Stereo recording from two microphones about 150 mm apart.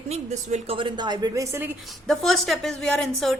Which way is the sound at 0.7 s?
30° right (ahead or behind).